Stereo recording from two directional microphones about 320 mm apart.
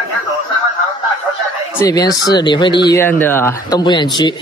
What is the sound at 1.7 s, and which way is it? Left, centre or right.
A man's voice, centre.